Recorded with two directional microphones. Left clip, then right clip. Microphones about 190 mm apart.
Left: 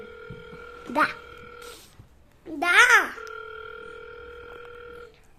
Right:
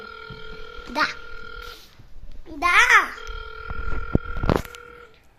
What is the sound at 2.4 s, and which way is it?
Speech, 60° left (ahead or behind).